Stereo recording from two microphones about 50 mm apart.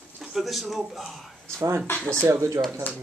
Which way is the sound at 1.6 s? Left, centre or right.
Right.